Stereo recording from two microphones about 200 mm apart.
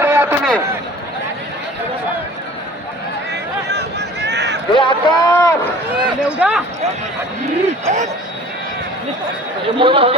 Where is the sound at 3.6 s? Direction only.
60° right (ahead or behind).